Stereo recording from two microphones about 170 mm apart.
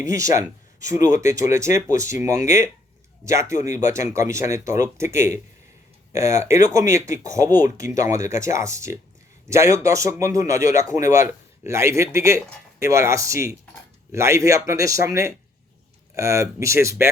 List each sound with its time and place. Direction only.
0.0 s speech: 20° right (ahead or behind)